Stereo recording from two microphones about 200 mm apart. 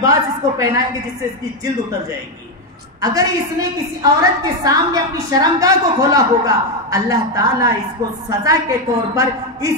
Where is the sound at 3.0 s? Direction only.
15° right (ahead or behind).